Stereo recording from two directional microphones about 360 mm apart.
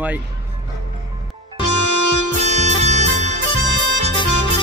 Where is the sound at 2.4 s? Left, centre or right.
Centre.